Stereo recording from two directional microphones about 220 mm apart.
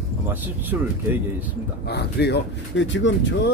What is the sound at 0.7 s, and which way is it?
Speech, 10° right (ahead or behind).